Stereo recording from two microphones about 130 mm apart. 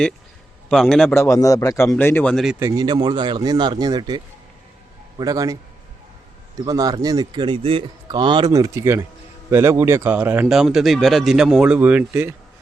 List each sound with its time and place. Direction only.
0.7 s a man's voice: 5° left (ahead or behind)
1.1 s a man's voice: 20° left (ahead or behind)
2.3 s a man's voice: centre (ahead or behind)
2.6 s speech: 25° right (ahead or behind)
6.7 s speech: 30° right (ahead or behind); by 7.9 s 45° right (ahead or behind)
8.0 s speech: 35° right (ahead or behind); by 12.3 s 15° right (ahead or behind)